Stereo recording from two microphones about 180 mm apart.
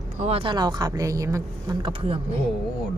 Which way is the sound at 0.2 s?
35° right (ahead or behind).